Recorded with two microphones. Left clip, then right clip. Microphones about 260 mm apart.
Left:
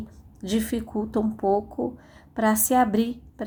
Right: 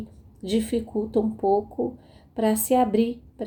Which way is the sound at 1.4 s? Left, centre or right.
Left.